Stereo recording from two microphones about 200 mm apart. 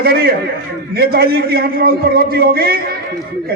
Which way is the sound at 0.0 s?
50° right (ahead or behind).